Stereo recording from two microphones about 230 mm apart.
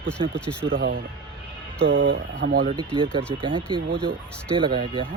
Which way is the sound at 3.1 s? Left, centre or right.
Right.